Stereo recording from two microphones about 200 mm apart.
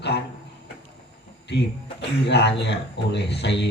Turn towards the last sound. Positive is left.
turn(degrees=60)  # may be behind; listen again after turning